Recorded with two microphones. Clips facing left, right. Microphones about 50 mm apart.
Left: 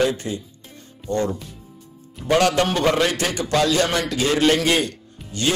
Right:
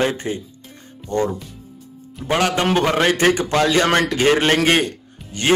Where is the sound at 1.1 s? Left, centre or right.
Right.